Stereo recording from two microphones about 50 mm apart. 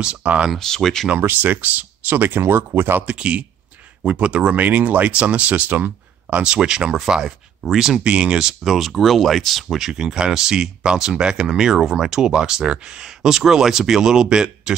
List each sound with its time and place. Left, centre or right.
0.0 s speech: right
0.6 s speech: centre
1.2 s speech: right
3.1 s speech: right
6.3 s speech: centre
8.0 s speech: right